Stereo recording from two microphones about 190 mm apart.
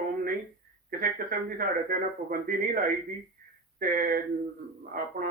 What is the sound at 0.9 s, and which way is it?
Speech, 45° right (ahead or behind).